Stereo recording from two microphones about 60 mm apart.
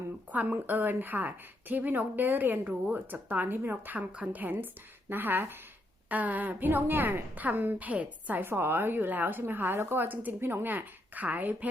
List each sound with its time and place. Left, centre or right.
0.3 s a woman's voice: right